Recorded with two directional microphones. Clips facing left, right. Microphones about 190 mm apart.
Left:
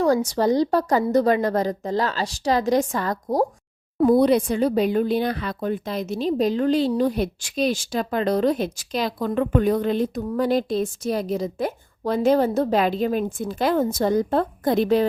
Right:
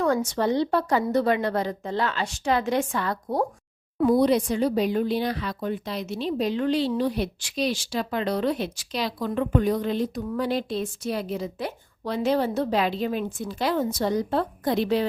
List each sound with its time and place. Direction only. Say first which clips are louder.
0.0 s a woman's voice: left 4 dB; 35° left (ahead or behind)
4.1 s speech: left 3 dB; 55° left (ahead or behind)